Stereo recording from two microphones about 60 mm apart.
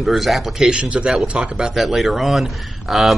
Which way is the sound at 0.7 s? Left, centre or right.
Right.